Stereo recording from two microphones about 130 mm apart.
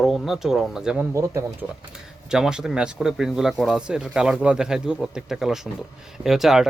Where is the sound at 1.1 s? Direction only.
20° right (ahead or behind).